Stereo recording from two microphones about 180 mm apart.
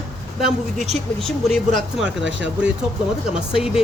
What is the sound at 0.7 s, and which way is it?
Speech, 40° right (ahead or behind).